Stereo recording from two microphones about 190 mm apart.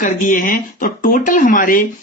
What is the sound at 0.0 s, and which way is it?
Speech, 45° left (ahead or behind).